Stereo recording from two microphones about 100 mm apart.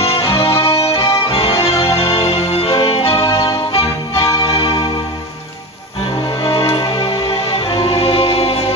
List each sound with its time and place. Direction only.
0.0 s music: 70° left (ahead or behind)
0.8 s accordion: 80° left
1.3 s music: 65° left (ahead or behind)
6.4 s music: 65° left (ahead or behind)